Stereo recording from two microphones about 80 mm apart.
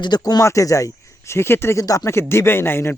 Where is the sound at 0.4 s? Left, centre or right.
Left.